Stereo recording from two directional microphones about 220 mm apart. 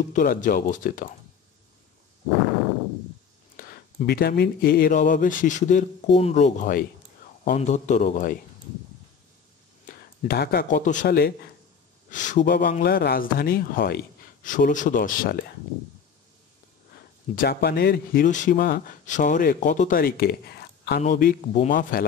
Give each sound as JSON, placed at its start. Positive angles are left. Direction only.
{"t": 0.1, "sound": "speech", "side_deg": 35}
{"t": 3.5, "sound": "speech", "side_deg": 45}
{"t": 9.8, "sound": "speech", "side_deg": 45}
{"t": 17.4, "sound": "speech", "side_deg": 45}